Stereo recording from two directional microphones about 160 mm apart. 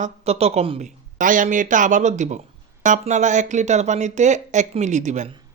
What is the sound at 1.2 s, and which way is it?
Speech, 55° right (ahead or behind).